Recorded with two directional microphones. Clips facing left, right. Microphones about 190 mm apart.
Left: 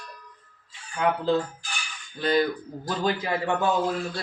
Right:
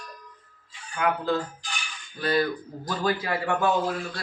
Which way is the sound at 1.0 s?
25° left (ahead or behind).